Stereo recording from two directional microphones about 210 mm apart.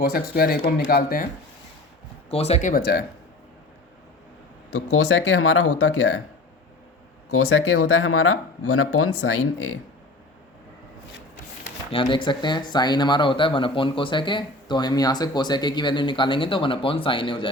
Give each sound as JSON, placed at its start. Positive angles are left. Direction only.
{"t": 0.0, "sound": "speech", "side_deg": 45}
{"t": 2.3, "sound": "speech", "side_deg": 30}
{"t": 4.7, "sound": "speech", "side_deg": 90}
{"t": 7.3, "sound": "speech", "side_deg": 85}
{"t": 11.9, "sound": "speech", "side_deg": 25}